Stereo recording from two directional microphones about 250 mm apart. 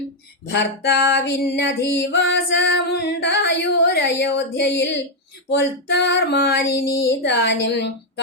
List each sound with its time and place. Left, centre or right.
0.4 s female singing: left